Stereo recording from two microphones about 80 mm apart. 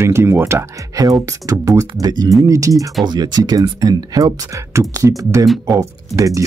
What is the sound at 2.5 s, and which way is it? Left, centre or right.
Speech, right.